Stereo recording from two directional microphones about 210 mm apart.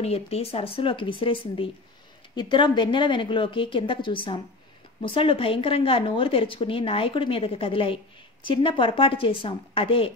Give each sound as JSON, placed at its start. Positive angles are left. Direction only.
{"t": 0.0, "sound": "speech", "side_deg": 30}